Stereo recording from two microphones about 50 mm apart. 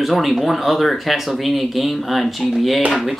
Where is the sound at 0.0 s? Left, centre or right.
Centre.